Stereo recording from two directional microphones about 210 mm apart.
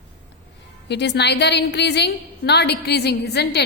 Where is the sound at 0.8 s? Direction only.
55° left (ahead or behind).